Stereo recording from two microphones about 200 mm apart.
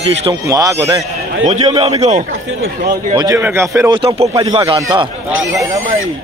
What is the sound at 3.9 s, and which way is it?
Speech, 30° right (ahead or behind).